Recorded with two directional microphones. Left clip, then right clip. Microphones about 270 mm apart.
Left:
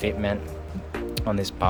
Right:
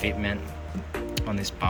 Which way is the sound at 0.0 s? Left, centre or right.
Centre.